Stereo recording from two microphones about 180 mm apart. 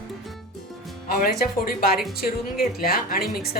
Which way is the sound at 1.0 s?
55° left (ahead or behind).